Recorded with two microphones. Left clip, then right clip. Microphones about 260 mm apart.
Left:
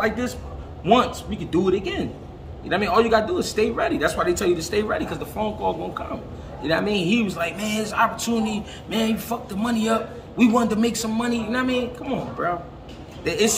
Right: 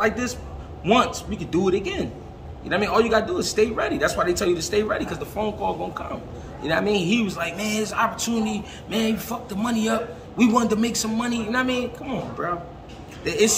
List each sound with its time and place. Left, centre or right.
0.0 s speech: centre